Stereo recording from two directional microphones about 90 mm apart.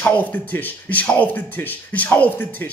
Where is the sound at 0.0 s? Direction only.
20° left (ahead or behind).